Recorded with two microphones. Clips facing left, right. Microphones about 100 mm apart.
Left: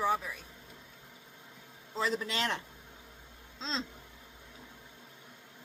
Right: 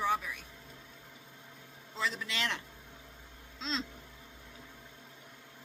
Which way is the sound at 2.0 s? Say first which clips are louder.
Left 4 dB; 40° left (ahead or behind).